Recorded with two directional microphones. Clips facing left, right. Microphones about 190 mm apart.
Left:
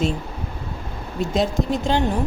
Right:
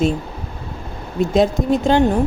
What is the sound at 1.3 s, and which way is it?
Speech, 50° right (ahead or behind).